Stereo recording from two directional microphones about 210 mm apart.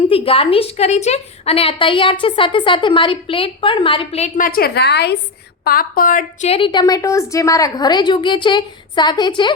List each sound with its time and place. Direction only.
0.1 s a woman's voice: 25° left (ahead or behind)